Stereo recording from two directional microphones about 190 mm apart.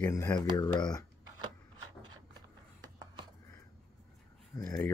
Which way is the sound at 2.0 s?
20° right (ahead or behind).